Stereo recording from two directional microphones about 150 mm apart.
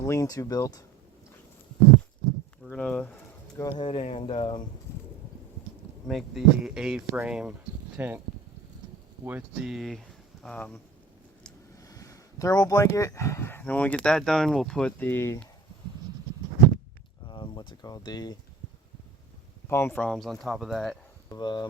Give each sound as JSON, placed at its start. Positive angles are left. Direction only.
{"t": 0.0, "sound": "speech", "side_deg": 20}
{"t": 2.6, "sound": "speech", "side_deg": 5}
{"t": 3.8, "sound": "speech", "side_deg": 40}
{"t": 6.1, "sound": "speech", "side_deg": 0}
{"t": 9.2, "sound": "speech", "side_deg": -10}
{"t": 11.8, "sound": "speech", "side_deg": 20}
{"t": 17.2, "sound": "speech", "side_deg": 35}
{"t": 19.6, "sound": "speech", "side_deg": 15}
{"t": 21.2, "sound": "speech", "side_deg": 25}